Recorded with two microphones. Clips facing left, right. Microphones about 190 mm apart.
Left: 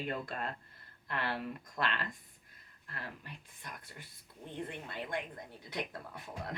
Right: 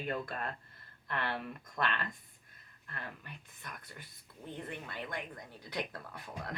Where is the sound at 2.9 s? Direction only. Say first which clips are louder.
Even; 30° left (ahead or behind).